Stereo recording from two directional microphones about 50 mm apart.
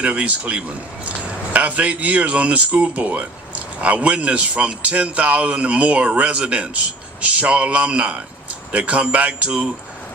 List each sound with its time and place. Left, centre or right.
0.0 s speech: right